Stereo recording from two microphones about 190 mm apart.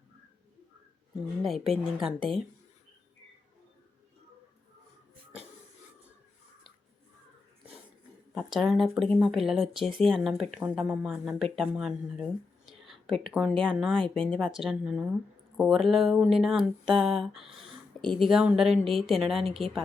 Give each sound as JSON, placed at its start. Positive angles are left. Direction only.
{"t": 1.4, "sound": "speech", "side_deg": 0}
{"t": 2.0, "sound": "a woman's voice", "side_deg": -25}
{"t": 8.4, "sound": "speech", "side_deg": 0}